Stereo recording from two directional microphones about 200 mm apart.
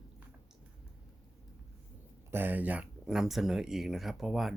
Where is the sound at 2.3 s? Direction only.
10° right (ahead or behind).